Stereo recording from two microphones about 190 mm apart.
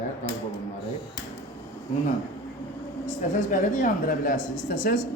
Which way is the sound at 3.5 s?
45° left (ahead or behind).